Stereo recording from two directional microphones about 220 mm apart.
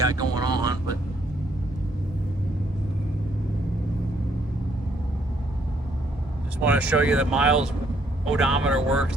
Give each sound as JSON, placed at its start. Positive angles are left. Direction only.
{"t": 0.0, "sound": "vehicle", "side_deg": -15}
{"t": 6.6, "sound": "speech", "side_deg": -5}